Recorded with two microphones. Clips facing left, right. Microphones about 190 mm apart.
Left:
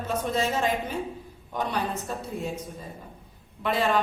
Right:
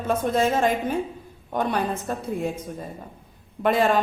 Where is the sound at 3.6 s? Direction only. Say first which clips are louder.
Right 5 dB; 50° right (ahead or behind).